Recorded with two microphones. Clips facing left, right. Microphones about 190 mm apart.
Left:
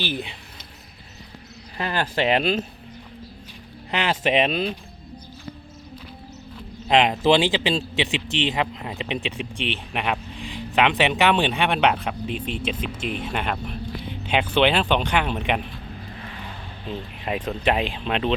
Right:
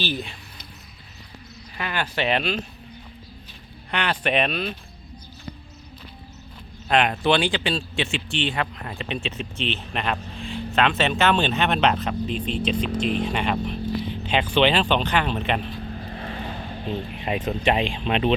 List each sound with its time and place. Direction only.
0.0 s speech: 15° left (ahead or behind)
1.8 s speech: 35° left (ahead or behind)
3.9 s a man's voice: 25° left (ahead or behind)
6.8 s a man's voice: 20° left (ahead or behind)
16.1 s vehicle: 40° right (ahead or behind)
17.2 s speech: 5° right (ahead or behind)